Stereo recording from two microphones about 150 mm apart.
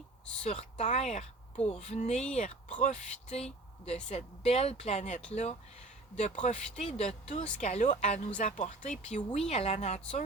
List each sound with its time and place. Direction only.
0.4 s speech: 45° left (ahead or behind)